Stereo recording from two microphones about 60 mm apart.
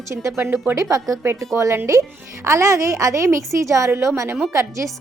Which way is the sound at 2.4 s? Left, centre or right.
Right.